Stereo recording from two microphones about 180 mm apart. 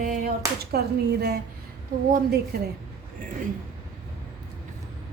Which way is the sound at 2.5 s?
65° right (ahead or behind).